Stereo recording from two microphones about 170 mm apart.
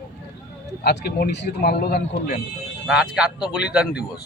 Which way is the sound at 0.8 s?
70° left (ahead or behind).